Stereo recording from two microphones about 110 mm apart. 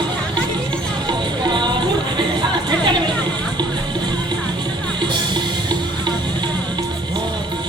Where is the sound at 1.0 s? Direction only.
45° right (ahead or behind).